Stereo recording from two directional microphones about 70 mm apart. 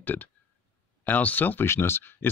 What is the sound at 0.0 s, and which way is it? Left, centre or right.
Speech, left.